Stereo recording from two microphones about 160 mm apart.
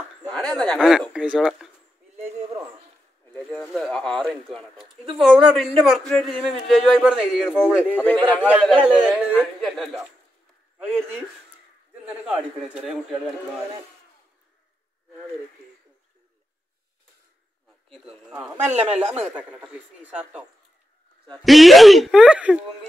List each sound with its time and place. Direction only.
0.3 s speech: 5° left (ahead or behind)
3.3 s a man's voice: centre (ahead or behind)
7.9 s a man's voice: 10° left (ahead or behind)
8.5 s a man's voice: 5° right (ahead or behind)
12.0 s a man's voice: 5° right (ahead or behind)
17.8 s a man's voice: centre (ahead or behind)